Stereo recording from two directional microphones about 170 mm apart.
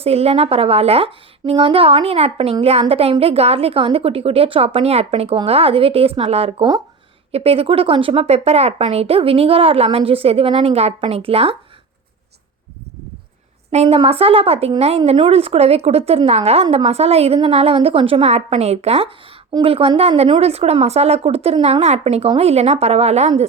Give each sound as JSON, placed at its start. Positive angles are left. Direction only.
{"t": 0.0, "sound": "speech", "side_deg": -35}
{"t": 13.7, "sound": "speech", "side_deg": -35}